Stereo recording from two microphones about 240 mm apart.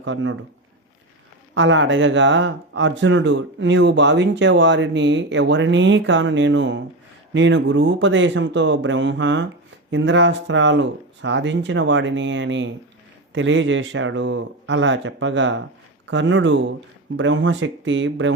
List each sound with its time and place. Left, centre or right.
0.0 s speech: right
1.5 s speech: right